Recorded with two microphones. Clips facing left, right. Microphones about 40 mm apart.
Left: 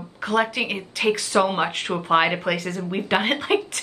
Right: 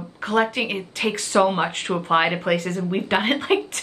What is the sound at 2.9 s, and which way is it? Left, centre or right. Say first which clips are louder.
Speech: even; centre.